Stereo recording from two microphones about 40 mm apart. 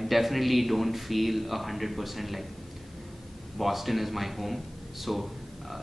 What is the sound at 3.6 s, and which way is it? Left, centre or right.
A man's voice, centre.